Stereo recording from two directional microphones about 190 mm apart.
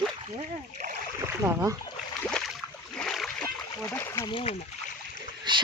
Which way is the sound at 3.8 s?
15° left (ahead or behind).